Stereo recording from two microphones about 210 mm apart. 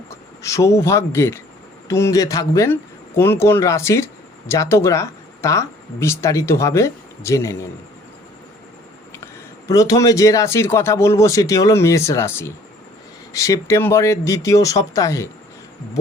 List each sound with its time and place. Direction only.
0.1 s speech: 15° left (ahead or behind)
9.2 s speech: 15° left (ahead or behind)